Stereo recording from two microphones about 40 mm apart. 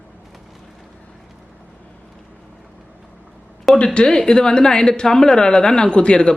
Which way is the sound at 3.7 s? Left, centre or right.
Left.